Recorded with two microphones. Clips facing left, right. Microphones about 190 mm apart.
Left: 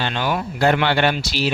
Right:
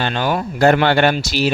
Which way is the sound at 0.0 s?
45° right (ahead or behind).